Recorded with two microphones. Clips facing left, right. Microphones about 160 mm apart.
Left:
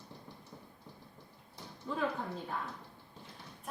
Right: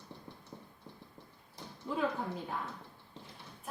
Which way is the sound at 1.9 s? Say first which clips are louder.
Right 2 dB; 15° right (ahead or behind).